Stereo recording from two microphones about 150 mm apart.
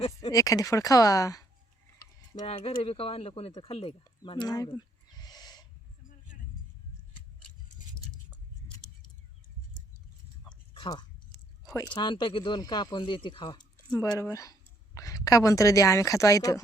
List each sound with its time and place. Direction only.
0.0 s a woman's voice: 30° left (ahead or behind)
2.4 s speech: 45° left (ahead or behind); by 5.6 s 25° left (ahead or behind)
10.8 s a sound: 30° left (ahead or behind)
11.9 s speech: 35° left (ahead or behind)
14.0 s a woman's voice: 20° left (ahead or behind)